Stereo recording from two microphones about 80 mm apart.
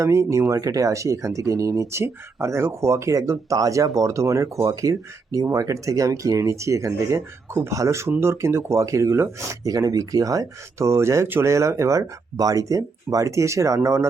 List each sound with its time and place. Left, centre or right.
0.0 s speech: right
9.6 s speech: right